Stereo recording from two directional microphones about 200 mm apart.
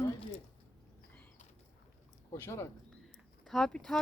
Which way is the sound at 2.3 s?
15° left (ahead or behind).